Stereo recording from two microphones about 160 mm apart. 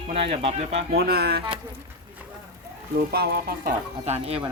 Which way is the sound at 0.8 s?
75° right (ahead or behind).